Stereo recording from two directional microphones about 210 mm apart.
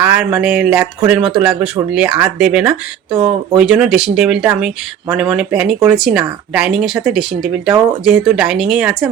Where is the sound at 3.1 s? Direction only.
25° right (ahead or behind).